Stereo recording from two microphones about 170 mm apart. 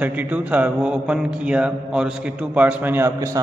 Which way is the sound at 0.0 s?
10° right (ahead or behind).